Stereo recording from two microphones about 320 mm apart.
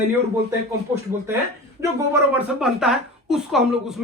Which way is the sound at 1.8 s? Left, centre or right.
Centre.